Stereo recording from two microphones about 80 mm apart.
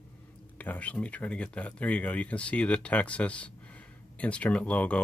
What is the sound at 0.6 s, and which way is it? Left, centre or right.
Speech, centre.